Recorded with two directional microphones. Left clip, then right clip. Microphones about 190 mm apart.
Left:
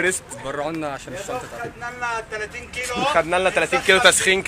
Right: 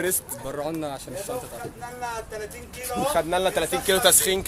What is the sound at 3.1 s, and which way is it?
Speech, 5° left (ahead or behind).